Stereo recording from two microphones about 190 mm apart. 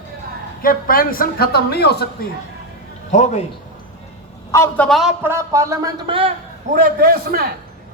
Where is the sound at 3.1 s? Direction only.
40° left (ahead or behind).